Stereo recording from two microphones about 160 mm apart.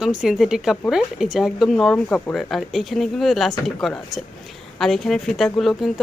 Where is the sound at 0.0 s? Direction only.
5° right (ahead or behind).